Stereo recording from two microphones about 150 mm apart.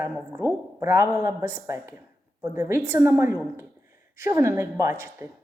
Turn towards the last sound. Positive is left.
turn(degrees=-20)  # may be behind; listen again after turning